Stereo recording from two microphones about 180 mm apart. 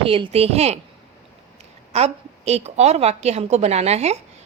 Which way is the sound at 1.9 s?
35° right (ahead or behind).